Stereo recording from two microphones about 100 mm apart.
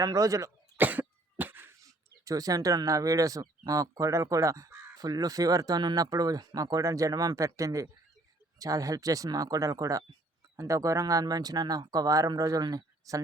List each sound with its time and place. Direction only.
0.0 s speech: 35° right (ahead or behind)
0.8 s cough: 15° right (ahead or behind)
1.8 s speech: 35° right (ahead or behind)